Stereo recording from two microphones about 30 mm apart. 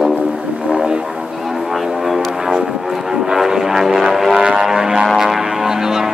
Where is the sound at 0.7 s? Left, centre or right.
Right.